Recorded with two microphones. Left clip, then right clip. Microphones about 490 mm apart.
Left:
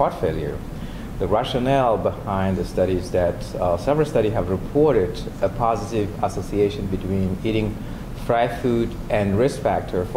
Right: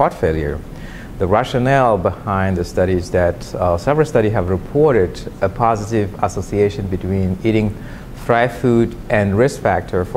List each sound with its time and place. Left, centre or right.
0.0 s speech: right